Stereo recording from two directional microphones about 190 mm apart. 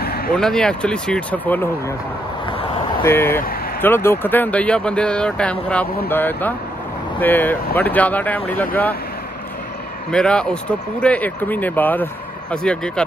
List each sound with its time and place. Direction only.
0.0 s vehicle: 55° left (ahead or behind)
0.3 s speech: 5° left (ahead or behind)
3.0 s speech: 10° left (ahead or behind)
10.1 s speech: 5° left (ahead or behind)